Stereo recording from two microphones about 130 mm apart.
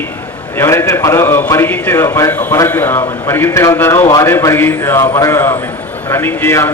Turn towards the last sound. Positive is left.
turn(degrees=20)  # may be behind; listen again after turning